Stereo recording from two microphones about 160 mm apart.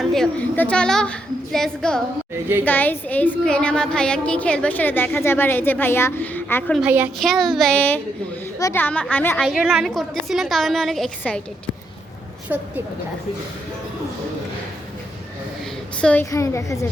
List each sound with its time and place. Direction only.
0.0 s a woman's voice: centre (ahead or behind)
6.7 s a woman's voice: 10° right (ahead or behind)
7.2 s a woman's voice: centre (ahead or behind)
9.4 s a woman's voice: 5° right (ahead or behind)
12.5 s a woman's voice: 10° right (ahead or behind)
16.0 s a woman's voice: 5° left (ahead or behind)
16.3 s a woman's voice: 20° left (ahead or behind)